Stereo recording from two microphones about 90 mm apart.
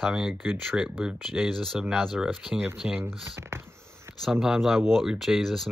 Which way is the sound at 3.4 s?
30° right (ahead or behind).